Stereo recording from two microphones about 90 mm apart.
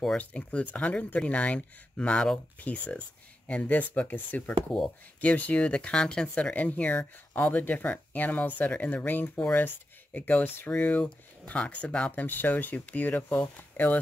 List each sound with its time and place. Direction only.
0.2 s speech: 15° left (ahead or behind)